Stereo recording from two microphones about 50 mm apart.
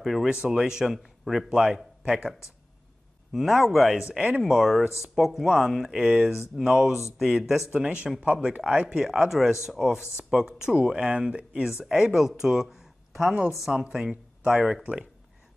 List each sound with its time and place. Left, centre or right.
0.0 s speech: centre
0.3 s a man's voice: centre
1.5 s a man's voice: centre
7.7 s speech: right
8.8 s a man's voice: centre